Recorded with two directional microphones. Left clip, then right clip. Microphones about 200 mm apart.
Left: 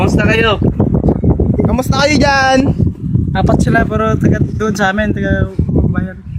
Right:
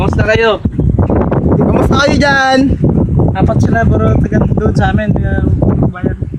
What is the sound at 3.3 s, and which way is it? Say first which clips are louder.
Speech: left 4 dB; 50° left (ahead or behind).